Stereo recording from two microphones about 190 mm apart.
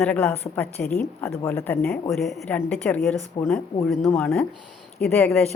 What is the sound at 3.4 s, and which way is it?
Speech, 25° left (ahead or behind).